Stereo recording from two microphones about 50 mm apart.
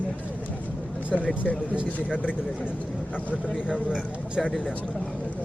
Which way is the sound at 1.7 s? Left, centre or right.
Right.